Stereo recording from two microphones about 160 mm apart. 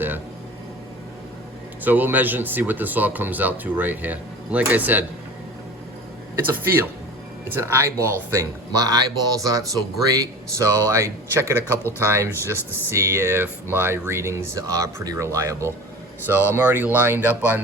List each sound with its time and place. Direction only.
1.8 s speech: 10° right (ahead or behind)
6.3 s speech: 15° right (ahead or behind)